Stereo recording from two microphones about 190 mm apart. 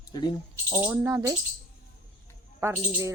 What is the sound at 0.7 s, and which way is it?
Speech, 15° right (ahead or behind).